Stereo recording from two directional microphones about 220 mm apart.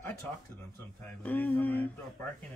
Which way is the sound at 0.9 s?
10° left (ahead or behind).